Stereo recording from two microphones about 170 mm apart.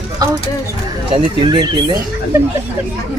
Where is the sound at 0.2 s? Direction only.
20° right (ahead or behind).